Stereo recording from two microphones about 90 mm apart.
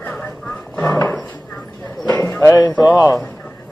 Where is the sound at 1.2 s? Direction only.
5° left (ahead or behind).